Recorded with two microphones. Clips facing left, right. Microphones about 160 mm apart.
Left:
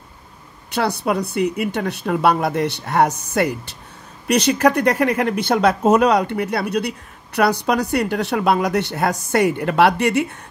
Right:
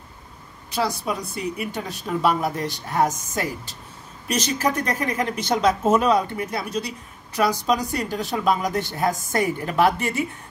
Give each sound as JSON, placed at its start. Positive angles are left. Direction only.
{"t": 0.7, "sound": "speech", "side_deg": 65}